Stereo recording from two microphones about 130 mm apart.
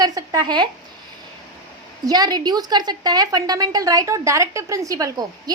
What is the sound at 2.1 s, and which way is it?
A woman's voice, 30° right (ahead or behind).